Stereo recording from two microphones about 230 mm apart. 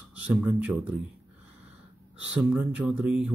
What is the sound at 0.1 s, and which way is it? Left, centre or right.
Speech, centre.